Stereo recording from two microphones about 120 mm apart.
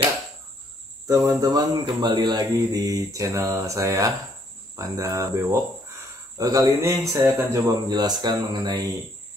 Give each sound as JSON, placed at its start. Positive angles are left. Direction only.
{"t": 1.0, "sound": "speech", "side_deg": -30}